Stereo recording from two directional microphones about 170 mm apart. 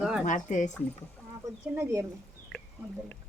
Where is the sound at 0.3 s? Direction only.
50° left (ahead or behind).